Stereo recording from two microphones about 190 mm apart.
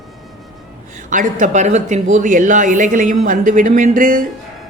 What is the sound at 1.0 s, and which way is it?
Speech, 40° right (ahead or behind).